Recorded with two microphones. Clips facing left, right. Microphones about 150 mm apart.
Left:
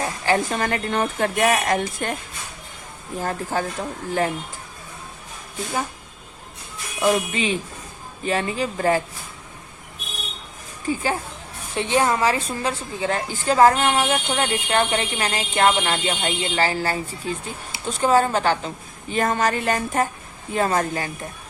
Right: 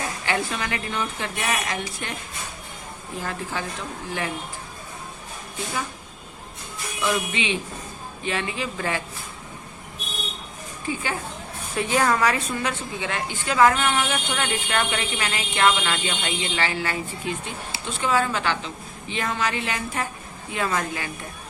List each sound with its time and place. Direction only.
0.0 s a woman's voice: 40° left (ahead or behind)
3.2 s a woman's voice: 45° left (ahead or behind)
7.0 s a woman's voice: 40° left (ahead or behind)
10.8 s a woman's voice: 35° left (ahead or behind)
11.7 s a woman's voice: 25° left (ahead or behind)